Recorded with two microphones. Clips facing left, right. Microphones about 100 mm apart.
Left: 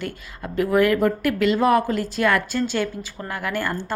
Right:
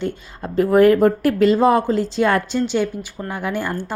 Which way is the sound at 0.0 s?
25° right (ahead or behind).